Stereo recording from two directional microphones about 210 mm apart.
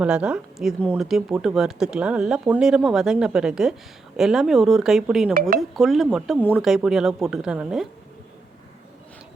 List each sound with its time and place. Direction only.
0.0 s speech: 5° right (ahead or behind)
5.3 s dishes: 45° right (ahead or behind)
5.5 s speech: centre (ahead or behind)